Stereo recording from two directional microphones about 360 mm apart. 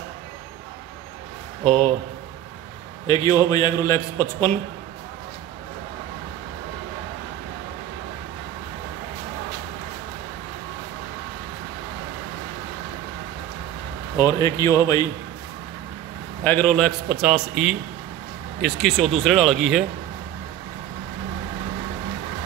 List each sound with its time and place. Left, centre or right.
1.6 s speech: centre
3.1 s a man's voice: centre
14.1 s a man's voice: centre
16.4 s a man's voice: centre